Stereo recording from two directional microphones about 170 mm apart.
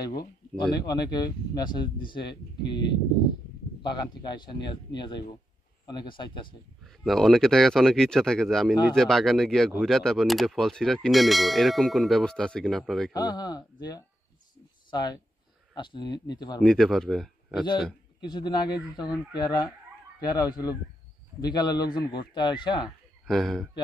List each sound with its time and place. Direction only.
0.0 s speech: 25° left (ahead or behind)
6.8 s speech: centre (ahead or behind)
13.1 s speech: 25° left (ahead or behind)
16.5 s speech: 5° left (ahead or behind)
18.2 s speech: 25° left (ahead or behind)
23.2 s speech: centre (ahead or behind)